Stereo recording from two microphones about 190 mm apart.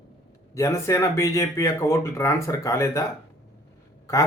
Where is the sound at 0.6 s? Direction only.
15° left (ahead or behind).